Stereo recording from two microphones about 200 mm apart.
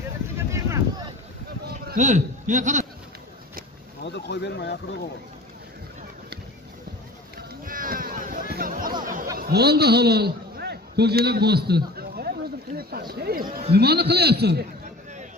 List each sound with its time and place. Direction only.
0.5 s a sound: 15° right (ahead or behind)
1.7 s speech: 45° right (ahead or behind)
4.0 s speech: 60° left (ahead or behind)
7.6 s a sound: 45° right (ahead or behind)
9.0 s chatter: 40° right (ahead or behind)
9.4 s a man's voice: 55° right (ahead or behind)